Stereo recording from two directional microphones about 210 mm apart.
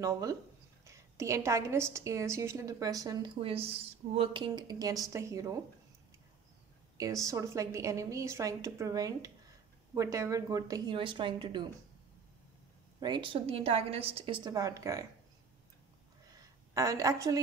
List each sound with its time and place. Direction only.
0.0 s a woman's voice: 15° right (ahead or behind)
7.0 s a woman's voice: 15° right (ahead or behind)
13.0 s a woman's voice: 20° right (ahead or behind)
16.7 s a woman's voice: 15° right (ahead or behind)